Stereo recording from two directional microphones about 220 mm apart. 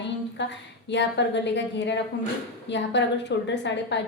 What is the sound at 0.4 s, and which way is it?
A woman's voice, 55° left (ahead or behind).